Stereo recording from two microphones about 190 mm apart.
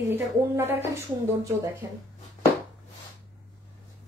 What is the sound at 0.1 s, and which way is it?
Speech, 10° right (ahead or behind).